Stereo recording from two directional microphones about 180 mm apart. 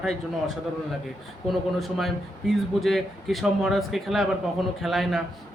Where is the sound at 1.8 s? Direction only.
Centre (ahead or behind).